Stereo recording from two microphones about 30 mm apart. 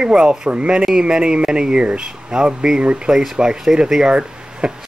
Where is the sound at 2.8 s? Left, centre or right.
Right.